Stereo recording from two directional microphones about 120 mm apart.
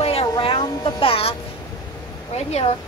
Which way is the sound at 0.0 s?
50° left (ahead or behind).